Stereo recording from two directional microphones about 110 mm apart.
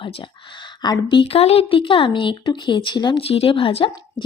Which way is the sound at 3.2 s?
60° left (ahead or behind).